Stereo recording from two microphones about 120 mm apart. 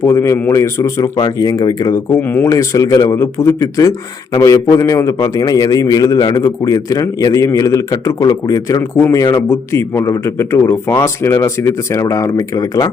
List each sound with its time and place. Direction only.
0.0 s a man's voice: 25° left (ahead or behind)
2.2 s speech: 15° left (ahead or behind)
2.5 s a man's voice: 30° left (ahead or behind)